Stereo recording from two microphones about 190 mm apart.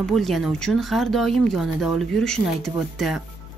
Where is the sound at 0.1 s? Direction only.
Centre (ahead or behind).